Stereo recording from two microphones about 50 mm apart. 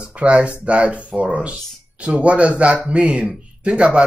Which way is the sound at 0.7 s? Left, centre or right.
Right.